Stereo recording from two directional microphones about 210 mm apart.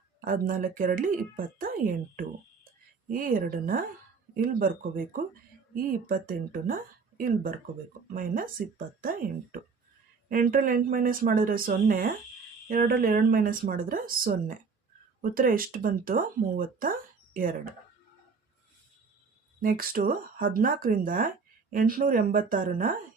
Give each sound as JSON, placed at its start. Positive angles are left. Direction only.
{"t": 0.3, "sound": "speech", "side_deg": -40}
{"t": 3.1, "sound": "speech", "side_deg": -40}
{"t": 19.6, "sound": "speech", "side_deg": -45}